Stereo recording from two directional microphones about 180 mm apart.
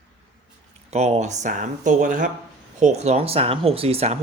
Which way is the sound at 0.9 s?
40° right (ahead or behind).